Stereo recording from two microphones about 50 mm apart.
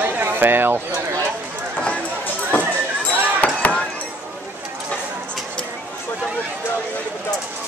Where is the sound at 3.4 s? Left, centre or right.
Left.